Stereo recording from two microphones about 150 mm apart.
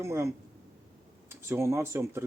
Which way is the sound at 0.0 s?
20° right (ahead or behind).